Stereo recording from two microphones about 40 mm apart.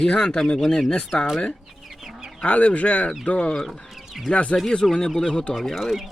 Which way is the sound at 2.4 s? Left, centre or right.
Left.